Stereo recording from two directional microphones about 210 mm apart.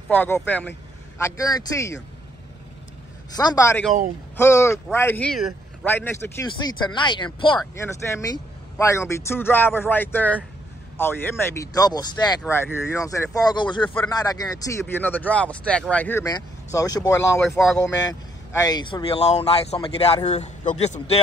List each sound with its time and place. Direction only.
0.1 s speech: 10° left (ahead or behind)
3.3 s speech: 15° left (ahead or behind)
18.5 s speech: 15° left (ahead or behind); by 21.2 s 35° left (ahead or behind)